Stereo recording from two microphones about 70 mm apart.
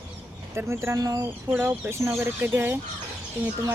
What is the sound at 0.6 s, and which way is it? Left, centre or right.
Speech, right.